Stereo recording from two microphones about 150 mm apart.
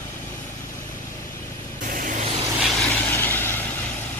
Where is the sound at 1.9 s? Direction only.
60° right (ahead or behind).